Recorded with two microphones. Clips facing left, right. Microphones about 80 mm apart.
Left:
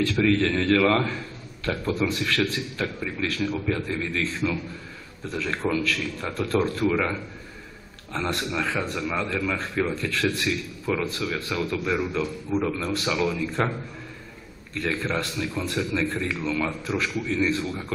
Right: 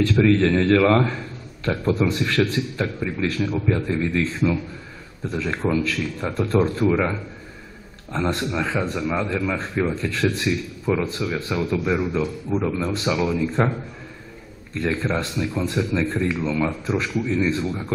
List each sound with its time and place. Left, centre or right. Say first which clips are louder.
0.0 s a man's voice: right 4 dB; right
5.3 s a man's voice: right 3 dB; right